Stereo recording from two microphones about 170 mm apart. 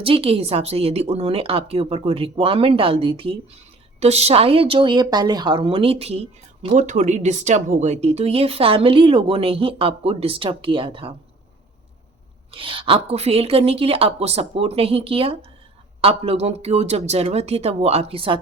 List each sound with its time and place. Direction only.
0.0 s a woman's voice: 35° right (ahead or behind)
12.5 s a woman's voice: 30° right (ahead or behind)